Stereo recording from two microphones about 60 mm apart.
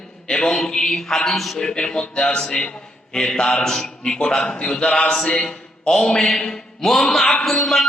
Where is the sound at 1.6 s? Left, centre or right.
Centre.